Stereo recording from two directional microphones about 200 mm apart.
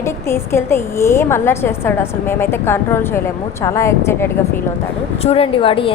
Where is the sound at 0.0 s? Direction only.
15° left (ahead or behind).